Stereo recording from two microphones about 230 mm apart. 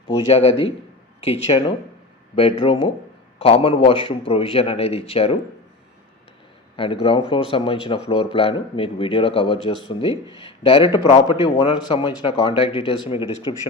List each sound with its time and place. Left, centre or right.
0.3 s speech: left
6.7 s speech: left